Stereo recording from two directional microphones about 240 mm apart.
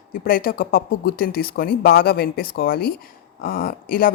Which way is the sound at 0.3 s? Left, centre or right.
Left.